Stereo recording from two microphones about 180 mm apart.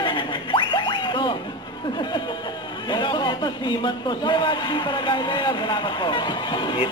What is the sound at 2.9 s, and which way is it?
Speech, 25° left (ahead or behind).